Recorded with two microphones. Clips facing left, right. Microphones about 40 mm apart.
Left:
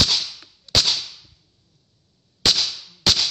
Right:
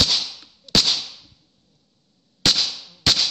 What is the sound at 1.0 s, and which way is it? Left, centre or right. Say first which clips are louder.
Whip: even; right.